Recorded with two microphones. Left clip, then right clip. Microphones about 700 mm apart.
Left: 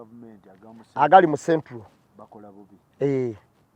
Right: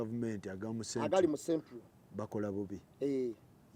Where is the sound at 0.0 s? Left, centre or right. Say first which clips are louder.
Right 7 dB; right.